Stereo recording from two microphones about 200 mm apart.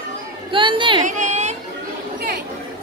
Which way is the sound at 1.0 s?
40° right (ahead or behind).